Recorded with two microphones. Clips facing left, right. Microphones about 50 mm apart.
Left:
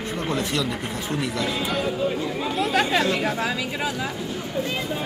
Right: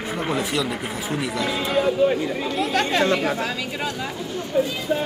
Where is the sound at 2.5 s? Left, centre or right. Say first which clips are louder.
Even; centre.